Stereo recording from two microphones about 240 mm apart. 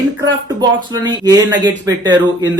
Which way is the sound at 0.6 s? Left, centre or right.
Centre.